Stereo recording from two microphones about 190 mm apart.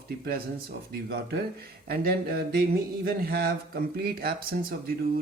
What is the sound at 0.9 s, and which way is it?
Speech, 55° right (ahead or behind).